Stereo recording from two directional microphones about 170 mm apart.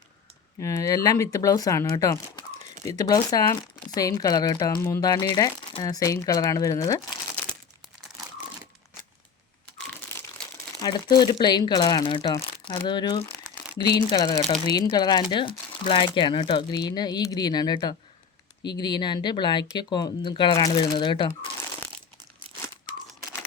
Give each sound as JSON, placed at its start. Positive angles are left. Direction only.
{"t": 0.6, "sound": "speech", "side_deg": 20}
{"t": 9.7, "sound": "crumpling", "side_deg": 5}
{"t": 10.8, "sound": "speech", "side_deg": 25}